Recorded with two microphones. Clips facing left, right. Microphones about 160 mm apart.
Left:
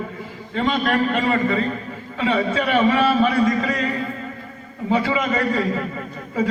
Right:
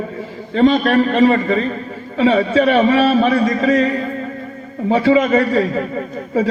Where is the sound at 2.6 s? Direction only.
60° right (ahead or behind).